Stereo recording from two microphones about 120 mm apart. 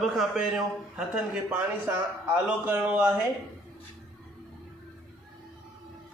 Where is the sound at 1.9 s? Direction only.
15° right (ahead or behind).